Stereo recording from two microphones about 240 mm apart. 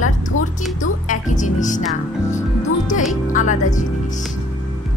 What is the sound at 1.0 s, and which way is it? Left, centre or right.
Speech, left.